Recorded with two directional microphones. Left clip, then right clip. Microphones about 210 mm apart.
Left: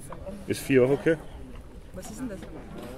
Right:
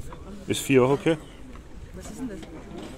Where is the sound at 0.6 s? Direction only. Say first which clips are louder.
Right 1 dB; 30° right (ahead or behind).